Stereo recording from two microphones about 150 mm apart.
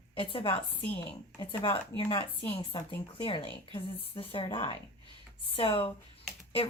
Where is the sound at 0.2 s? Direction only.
35° left (ahead or behind).